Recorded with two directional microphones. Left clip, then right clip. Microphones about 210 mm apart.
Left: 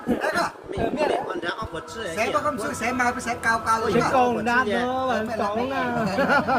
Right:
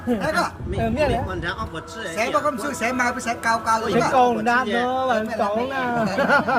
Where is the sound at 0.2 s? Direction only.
35° right (ahead or behind).